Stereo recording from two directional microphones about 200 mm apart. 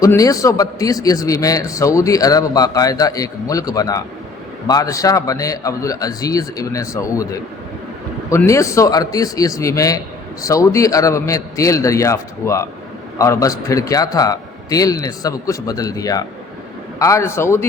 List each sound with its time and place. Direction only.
0.0 s a man's voice: 15° left (ahead or behind)
8.3 s a man's voice: 15° left (ahead or behind)